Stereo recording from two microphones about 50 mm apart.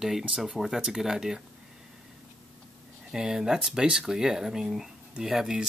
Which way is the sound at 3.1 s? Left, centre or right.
Centre.